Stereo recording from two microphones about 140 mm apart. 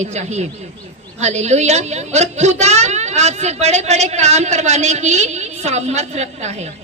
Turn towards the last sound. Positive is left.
turn(degrees=-55)  # may be behind; listen again after turning